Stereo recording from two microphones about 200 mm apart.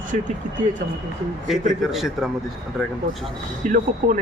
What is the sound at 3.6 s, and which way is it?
Speech, 40° right (ahead or behind).